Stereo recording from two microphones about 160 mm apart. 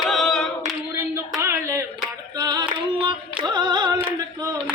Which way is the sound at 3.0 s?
30° right (ahead or behind).